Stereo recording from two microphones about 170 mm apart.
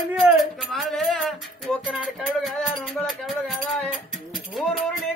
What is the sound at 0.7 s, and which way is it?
Music, centre (ahead or behind).